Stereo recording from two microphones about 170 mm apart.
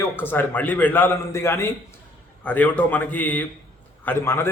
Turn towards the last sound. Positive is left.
turn(degrees=15)  # may be behind; listen again after turning